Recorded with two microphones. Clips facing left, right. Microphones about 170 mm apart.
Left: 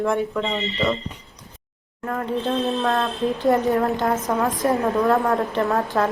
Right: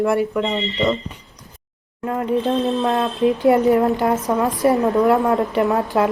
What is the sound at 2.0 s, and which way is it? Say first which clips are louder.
A woman's voice: right 4 dB; 20° right (ahead or behind).